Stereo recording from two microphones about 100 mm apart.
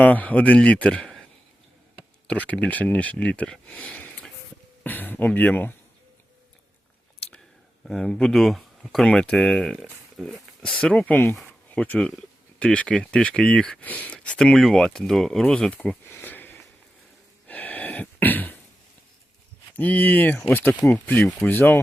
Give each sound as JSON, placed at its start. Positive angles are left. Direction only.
{"t": 0.0, "sound": "speech", "side_deg": 15}
{"t": 2.2, "sound": "speech", "side_deg": 15}
{"t": 7.9, "sound": "speech", "side_deg": 5}
{"t": 16.1, "sound": "a sound", "side_deg": 20}
{"t": 19.7, "sound": "speech", "side_deg": 20}